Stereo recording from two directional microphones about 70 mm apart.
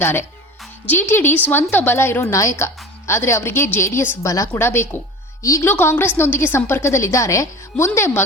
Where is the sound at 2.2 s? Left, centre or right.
Left.